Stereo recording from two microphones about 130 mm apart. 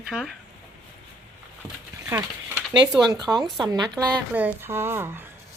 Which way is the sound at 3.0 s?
30° right (ahead or behind).